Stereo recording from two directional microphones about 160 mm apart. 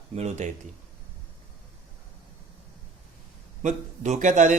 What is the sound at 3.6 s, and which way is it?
Speech, 50° right (ahead or behind).